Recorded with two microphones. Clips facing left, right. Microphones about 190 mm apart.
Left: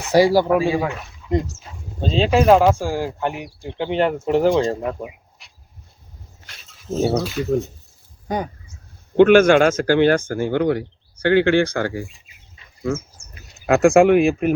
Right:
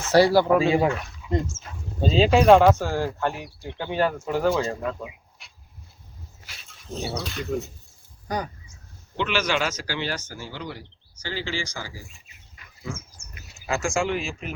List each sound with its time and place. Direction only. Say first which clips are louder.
0.0 s speech: left 3 dB; 15° left (ahead or behind)
0.6 s speech: even; 20° right (ahead or behind)
1.2 s dog: left 5 dB; 5° right (ahead or behind)
2.0 s speech: left 1 dB; centre (ahead or behind); by 5.1 s 20° left (ahead or behind)
5.4 s dog: left 1 dB; centre (ahead or behind)
7.0 s speech: left 12 dB; 55° left (ahead or behind)
7.3 s speech: left 8 dB; 5° left (ahead or behind)
8.3 s speech: left 5 dB; 20° left (ahead or behind)
9.1 s speech: left 14 dB; 50° left (ahead or behind)
13.7 s speech: left 13 dB; 60° left (ahead or behind)